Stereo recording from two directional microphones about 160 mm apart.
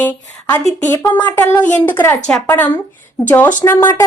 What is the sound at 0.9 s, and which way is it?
Speech, 10° left (ahead or behind).